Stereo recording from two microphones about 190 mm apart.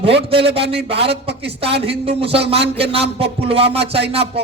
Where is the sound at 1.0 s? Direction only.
60° right (ahead or behind).